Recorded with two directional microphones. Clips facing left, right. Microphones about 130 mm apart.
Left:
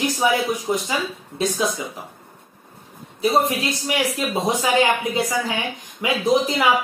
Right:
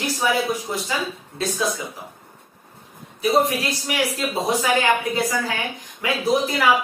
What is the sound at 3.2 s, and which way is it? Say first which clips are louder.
A woman's voice: even; 25° left (ahead or behind).